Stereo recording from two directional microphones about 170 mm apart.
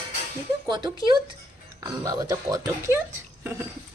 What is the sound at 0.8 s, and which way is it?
A woman's voice, 25° right (ahead or behind).